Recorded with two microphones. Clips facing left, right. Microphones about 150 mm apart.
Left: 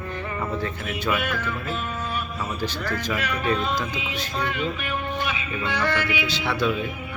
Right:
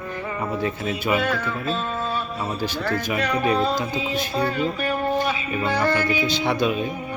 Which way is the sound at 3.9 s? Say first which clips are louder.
Right 5 dB; 35° right (ahead or behind).